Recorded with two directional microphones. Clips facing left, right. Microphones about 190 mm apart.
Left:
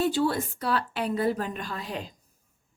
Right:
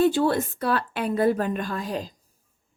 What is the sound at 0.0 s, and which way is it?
Speech, 55° right (ahead or behind).